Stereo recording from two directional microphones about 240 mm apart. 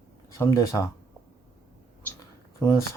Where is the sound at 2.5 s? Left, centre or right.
Centre.